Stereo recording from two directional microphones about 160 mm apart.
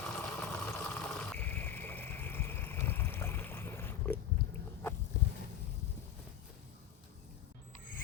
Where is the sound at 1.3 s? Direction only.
10° left (ahead or behind).